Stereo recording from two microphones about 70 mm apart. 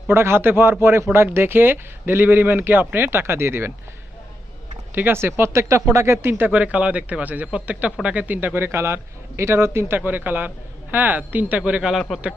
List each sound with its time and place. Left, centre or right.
0.1 s speech: right
4.9 s speech: right; by 12.0 s centre